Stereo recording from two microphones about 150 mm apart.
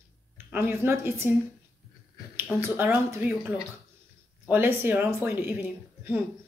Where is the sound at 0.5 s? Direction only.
15° right (ahead or behind).